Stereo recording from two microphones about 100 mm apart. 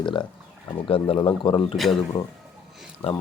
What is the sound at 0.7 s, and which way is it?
Speech, 65° left (ahead or behind).